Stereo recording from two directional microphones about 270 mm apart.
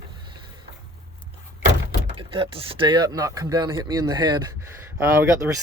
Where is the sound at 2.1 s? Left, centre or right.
Centre.